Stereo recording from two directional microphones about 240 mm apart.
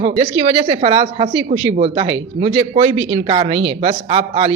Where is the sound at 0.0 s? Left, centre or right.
Right.